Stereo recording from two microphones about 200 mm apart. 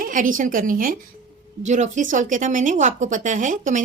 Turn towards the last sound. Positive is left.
turn(degrees=-40)  # may be behind; listen again after turning